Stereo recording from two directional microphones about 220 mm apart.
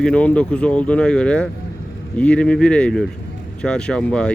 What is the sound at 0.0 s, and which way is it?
Speech, 5° left (ahead or behind).